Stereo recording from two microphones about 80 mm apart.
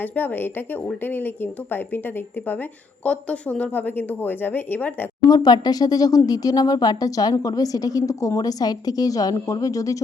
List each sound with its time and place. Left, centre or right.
0.0 s a woman's voice: left
3.0 s a woman's voice: centre
5.3 s speech: left